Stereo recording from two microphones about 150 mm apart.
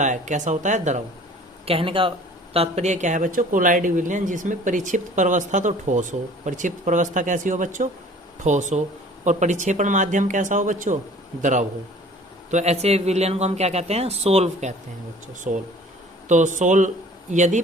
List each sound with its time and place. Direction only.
0.0 s speech: 55° right (ahead or behind)
1.6 s speech: 40° right (ahead or behind); by 10.9 s 55° right (ahead or behind)
12.5 s speech: 50° right (ahead or behind)
15.5 s speech: 55° right (ahead or behind)